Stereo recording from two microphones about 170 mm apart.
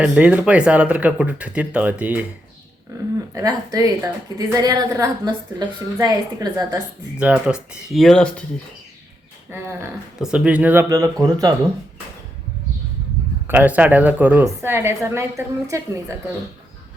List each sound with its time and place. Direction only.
0.0 s a woman's voice: 5° right (ahead or behind)
3.3 s a woman's voice: 20° right (ahead or behind)
7.2 s speech: 5° right (ahead or behind)
9.5 s a woman's voice: 15° right (ahead or behind)
13.5 s a woman's voice: 10° right (ahead or behind)